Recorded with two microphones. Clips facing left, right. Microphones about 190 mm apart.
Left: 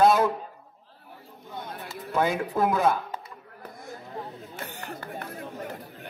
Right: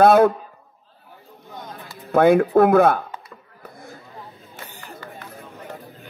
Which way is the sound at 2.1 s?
60° right (ahead or behind).